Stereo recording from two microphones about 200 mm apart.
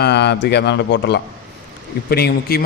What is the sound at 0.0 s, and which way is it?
A man's voice, 55° left (ahead or behind).